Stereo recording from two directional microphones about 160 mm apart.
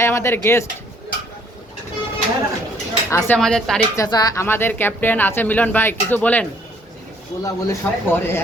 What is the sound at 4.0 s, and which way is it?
A woman's voice, 25° left (ahead or behind).